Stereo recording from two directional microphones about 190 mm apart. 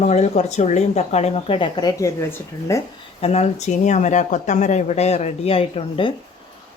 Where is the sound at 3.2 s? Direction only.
35° left (ahead or behind).